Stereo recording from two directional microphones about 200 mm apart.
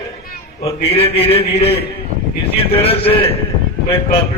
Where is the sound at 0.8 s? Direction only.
30° left (ahead or behind).